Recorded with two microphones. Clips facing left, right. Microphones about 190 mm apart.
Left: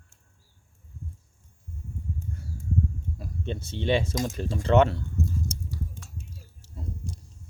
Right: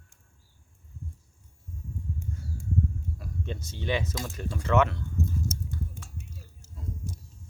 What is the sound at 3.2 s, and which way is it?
Speech, 25° left (ahead or behind).